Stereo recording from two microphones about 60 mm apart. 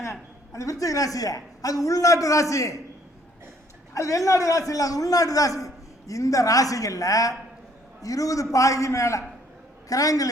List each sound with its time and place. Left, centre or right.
0.0 s a man's voice: left
3.9 s a man's voice: left
9.9 s a woman's voice: left